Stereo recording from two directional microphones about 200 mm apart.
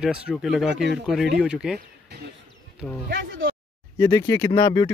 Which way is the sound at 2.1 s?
55° right (ahead or behind).